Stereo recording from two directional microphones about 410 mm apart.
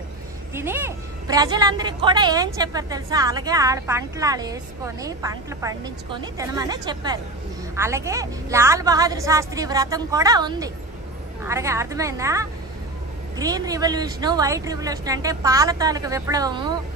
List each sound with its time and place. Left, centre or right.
0.6 s a woman's voice: centre